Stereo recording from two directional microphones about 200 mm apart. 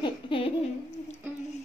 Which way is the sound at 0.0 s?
25° left (ahead or behind).